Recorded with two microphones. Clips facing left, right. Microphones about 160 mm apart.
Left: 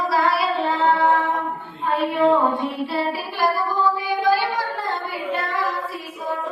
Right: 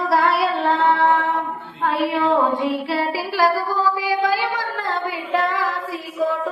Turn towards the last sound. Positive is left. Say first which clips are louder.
# right 6 dB
turn(degrees=-90)